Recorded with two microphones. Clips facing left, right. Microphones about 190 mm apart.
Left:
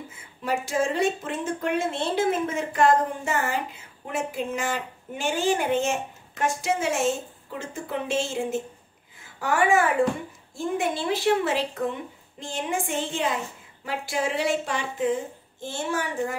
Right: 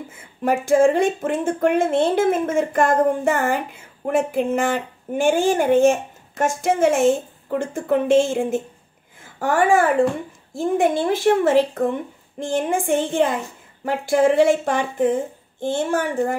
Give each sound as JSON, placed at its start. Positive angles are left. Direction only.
{"t": 0.1, "sound": "speech", "side_deg": -50}